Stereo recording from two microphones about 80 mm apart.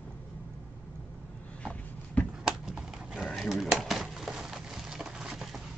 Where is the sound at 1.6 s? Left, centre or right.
Centre.